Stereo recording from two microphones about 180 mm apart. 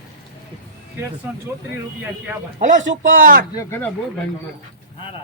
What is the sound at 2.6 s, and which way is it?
Speech, 45° right (ahead or behind).